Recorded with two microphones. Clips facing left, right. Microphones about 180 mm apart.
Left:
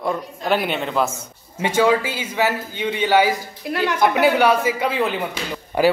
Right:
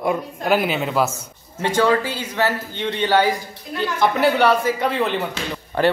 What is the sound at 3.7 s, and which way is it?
Speech, 70° left (ahead or behind).